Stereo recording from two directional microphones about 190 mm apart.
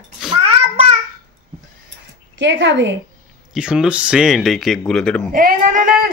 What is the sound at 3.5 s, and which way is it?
Speech, 5° right (ahead or behind).